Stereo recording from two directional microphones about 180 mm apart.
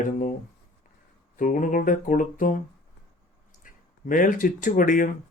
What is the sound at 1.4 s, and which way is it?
Speech, 45° left (ahead or behind).